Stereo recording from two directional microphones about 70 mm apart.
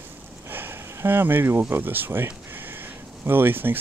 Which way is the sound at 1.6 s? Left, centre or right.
Right.